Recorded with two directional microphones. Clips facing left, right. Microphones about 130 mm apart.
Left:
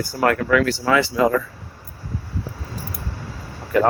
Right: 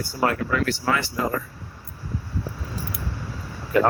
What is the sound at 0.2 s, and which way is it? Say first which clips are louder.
Speech: left 5 dB; 75° left (ahead or behind).